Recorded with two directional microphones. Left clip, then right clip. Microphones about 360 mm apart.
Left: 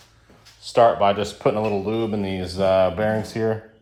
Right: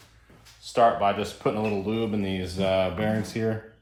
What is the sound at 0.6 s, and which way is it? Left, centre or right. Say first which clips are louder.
Speech: left 5 dB; left.